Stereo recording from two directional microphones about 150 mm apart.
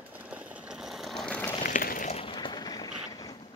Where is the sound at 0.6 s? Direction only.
Centre (ahead or behind).